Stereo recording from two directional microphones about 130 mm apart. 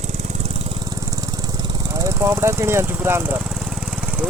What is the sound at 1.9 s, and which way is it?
Speech, 25° right (ahead or behind).